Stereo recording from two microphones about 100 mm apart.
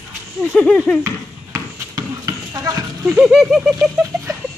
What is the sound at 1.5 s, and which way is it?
Basketball bounce, 35° right (ahead or behind).